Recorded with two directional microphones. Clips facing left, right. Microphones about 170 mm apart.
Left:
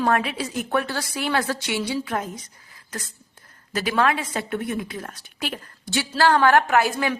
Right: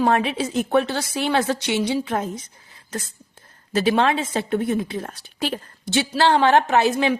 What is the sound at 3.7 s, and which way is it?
A woman's voice, 25° right (ahead or behind).